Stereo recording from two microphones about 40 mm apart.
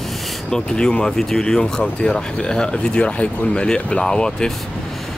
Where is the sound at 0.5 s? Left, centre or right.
Centre.